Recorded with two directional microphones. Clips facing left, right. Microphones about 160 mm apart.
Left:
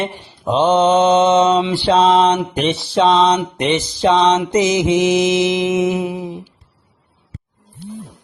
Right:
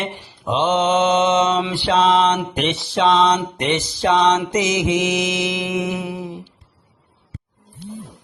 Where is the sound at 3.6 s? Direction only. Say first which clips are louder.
Left 4 dB; 20° left (ahead or behind).